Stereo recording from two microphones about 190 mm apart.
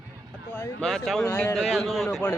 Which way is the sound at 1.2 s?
15° left (ahead or behind).